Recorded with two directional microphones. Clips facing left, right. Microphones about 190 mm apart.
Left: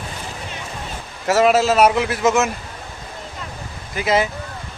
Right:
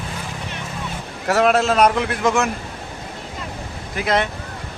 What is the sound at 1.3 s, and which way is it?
Speech, centre (ahead or behind).